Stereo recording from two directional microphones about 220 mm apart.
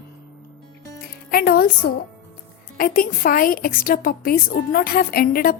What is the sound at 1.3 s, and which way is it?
Speech, 45° left (ahead or behind).